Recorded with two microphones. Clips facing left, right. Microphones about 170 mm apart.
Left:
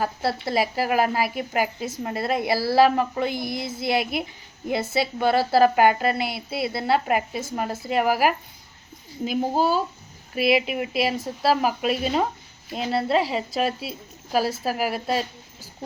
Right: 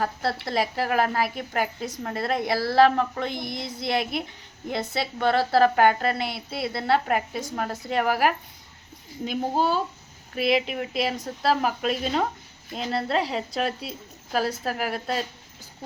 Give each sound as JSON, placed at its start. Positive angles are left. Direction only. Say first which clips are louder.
{"t": 0.0, "sound": "speech", "louder": "left 2 dB", "side_deg": 5}